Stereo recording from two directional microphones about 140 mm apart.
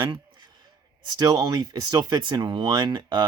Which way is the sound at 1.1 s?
30° right (ahead or behind).